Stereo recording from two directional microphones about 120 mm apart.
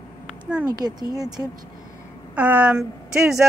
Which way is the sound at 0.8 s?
30° right (ahead or behind).